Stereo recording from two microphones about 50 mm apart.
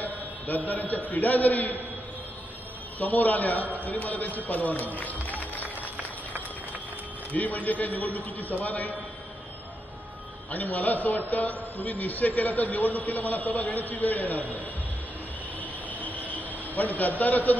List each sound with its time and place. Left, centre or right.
0.0 s a man's voice: left
3.0 s a man's voice: left
5.4 s music: left
7.3 s a man's voice: left
10.5 s a man's voice: left
15.6 s vehicle: left
16.4 s a sound: left
17.2 s a man's voice: left